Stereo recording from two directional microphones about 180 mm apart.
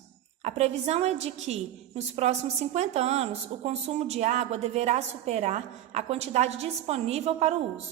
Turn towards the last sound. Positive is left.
turn(degrees=-35)  # may be behind; listen again after turning